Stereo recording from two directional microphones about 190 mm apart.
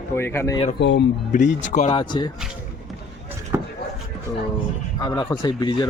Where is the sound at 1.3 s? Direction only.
40° left (ahead or behind); by 2.3 s 25° left (ahead or behind).